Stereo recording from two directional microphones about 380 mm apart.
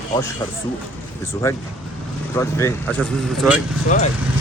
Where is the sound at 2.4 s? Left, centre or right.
Centre.